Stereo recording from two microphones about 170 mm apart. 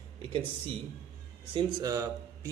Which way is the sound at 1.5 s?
20° right (ahead or behind).